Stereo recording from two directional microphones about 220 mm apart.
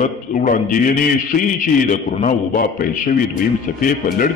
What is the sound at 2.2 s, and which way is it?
A man's voice, 40° left (ahead or behind).